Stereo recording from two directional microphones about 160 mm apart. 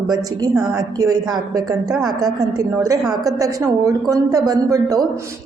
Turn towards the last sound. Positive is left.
turn(degrees=-20)  # may be behind; listen again after turning